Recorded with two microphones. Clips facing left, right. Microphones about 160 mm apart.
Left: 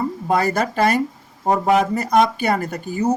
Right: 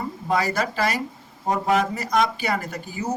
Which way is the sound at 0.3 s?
55° left (ahead or behind).